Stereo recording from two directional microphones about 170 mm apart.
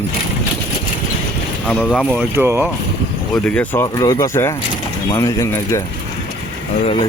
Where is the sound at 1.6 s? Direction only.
Centre (ahead or behind); by 2.6 s 15° right (ahead or behind).